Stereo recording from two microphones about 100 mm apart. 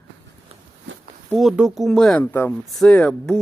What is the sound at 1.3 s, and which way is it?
Speech, 5° right (ahead or behind).